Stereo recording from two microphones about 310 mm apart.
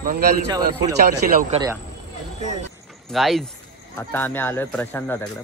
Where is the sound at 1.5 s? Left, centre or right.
Centre.